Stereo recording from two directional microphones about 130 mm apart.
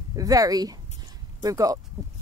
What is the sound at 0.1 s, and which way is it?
A woman's voice, 30° right (ahead or behind).